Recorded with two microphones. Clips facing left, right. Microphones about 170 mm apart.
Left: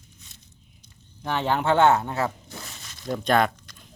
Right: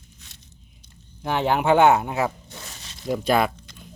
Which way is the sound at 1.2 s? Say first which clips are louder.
Right 3 dB; 15° right (ahead or behind).